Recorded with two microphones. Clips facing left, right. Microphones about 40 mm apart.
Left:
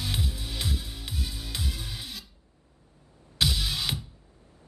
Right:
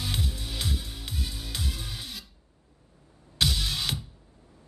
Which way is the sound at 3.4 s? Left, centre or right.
Centre.